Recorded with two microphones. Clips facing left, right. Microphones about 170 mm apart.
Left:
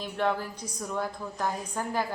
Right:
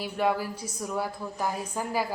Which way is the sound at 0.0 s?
10° right (ahead or behind).